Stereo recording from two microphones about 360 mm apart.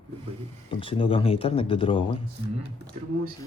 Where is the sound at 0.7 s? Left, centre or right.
Centre.